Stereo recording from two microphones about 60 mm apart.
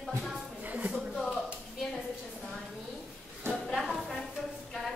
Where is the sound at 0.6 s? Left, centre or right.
Right.